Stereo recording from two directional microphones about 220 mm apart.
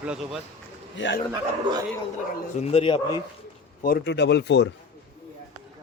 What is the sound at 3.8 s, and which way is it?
Speech, 45° left (ahead or behind).